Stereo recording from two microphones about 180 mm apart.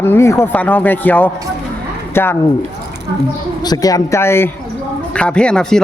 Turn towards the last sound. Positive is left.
turn(degrees=5)  # may be behind; listen again after turning